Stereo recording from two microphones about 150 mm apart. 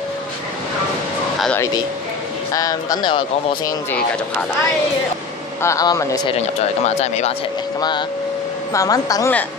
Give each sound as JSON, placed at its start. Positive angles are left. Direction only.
{"t": 2.5, "sound": "speech", "side_deg": 25}
{"t": 5.6, "sound": "speech", "side_deg": 20}
{"t": 7.0, "sound": "speech", "side_deg": 45}
{"t": 8.7, "sound": "speech", "side_deg": 25}